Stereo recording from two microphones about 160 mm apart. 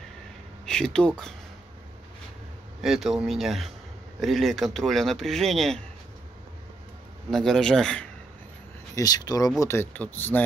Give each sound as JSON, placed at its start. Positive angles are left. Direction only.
{"t": 0.7, "sound": "speech", "side_deg": 5}
{"t": 2.8, "sound": "speech", "side_deg": 0}
{"t": 7.2, "sound": "speech", "side_deg": 0}
{"t": 8.9, "sound": "speech", "side_deg": 25}